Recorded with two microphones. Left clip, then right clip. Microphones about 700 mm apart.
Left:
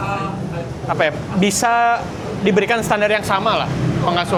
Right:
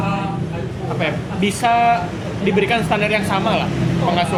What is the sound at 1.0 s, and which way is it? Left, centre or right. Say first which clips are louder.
A man's voice: left 3 dB; left.